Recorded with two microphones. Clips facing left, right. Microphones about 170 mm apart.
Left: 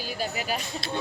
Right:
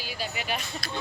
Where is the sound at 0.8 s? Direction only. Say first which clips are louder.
Left 4 dB; 25° left (ahead or behind).